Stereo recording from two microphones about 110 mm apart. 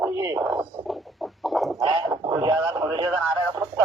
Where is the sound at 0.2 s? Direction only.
30° right (ahead or behind).